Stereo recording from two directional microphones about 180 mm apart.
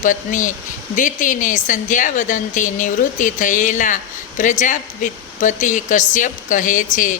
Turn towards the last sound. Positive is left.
turn(degrees=45)  # may be behind; listen again after turning